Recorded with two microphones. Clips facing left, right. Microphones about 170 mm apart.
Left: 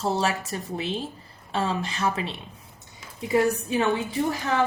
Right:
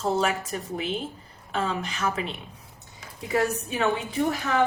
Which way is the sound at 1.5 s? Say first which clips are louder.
Left 2 dB; 30° left (ahead or behind).